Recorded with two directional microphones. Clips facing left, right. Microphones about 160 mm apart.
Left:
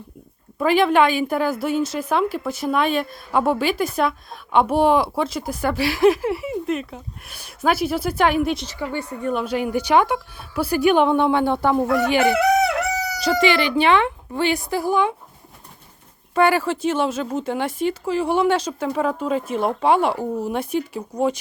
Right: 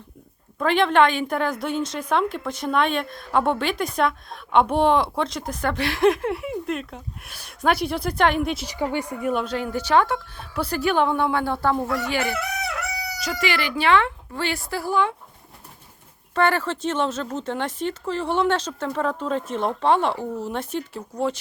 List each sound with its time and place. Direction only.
0.6 s a woman's voice: 5° left (ahead or behind)
8.6 s speech: 15° right (ahead or behind)
9.3 s speech: 10° left (ahead or behind)
12.4 s crowing: 90° left
13.1 s speech: 30° left (ahead or behind)
16.3 s speech: 10° left (ahead or behind)